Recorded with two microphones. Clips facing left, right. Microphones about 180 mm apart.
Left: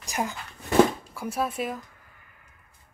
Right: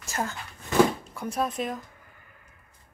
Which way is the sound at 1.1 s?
5° left (ahead or behind).